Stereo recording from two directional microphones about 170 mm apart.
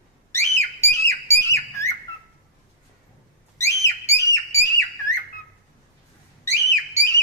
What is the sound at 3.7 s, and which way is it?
Whistle, 20° left (ahead or behind).